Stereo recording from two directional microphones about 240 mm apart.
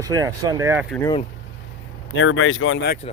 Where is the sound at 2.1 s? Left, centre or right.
Left.